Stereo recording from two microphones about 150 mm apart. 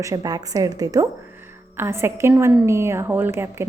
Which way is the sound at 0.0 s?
25° right (ahead or behind).